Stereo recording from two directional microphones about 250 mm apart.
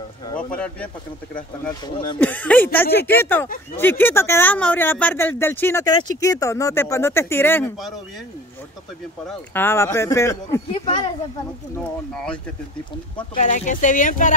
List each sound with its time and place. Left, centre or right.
0.5 s speech: centre
1.3 s speech: centre
9.3 s speech: centre
12.1 s speech: centre
13.3 s speech: left